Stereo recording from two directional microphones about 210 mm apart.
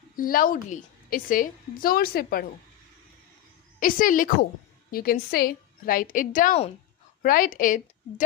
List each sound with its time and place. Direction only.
0.2 s a woman's voice: 40° left (ahead or behind)
3.8 s a woman's voice: 40° left (ahead or behind)